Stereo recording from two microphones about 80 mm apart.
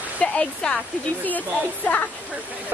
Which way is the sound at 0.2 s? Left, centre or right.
Centre.